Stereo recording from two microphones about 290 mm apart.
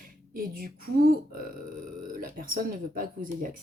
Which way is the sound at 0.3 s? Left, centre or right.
Right.